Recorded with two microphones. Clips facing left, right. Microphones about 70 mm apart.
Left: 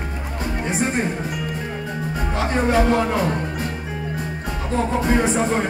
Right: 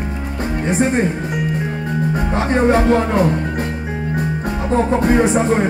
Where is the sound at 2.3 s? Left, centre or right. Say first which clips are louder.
Right 5 dB; right.